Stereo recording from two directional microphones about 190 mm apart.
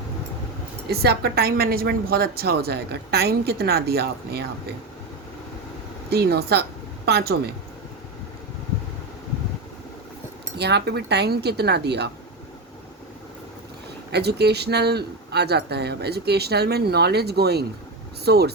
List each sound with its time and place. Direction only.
0.9 s a woman's voice: 55° right (ahead or behind)
6.1 s a woman's voice: 55° right (ahead or behind)
10.6 s a woman's voice: 60° right (ahead or behind)
14.1 s a woman's voice: 60° right (ahead or behind)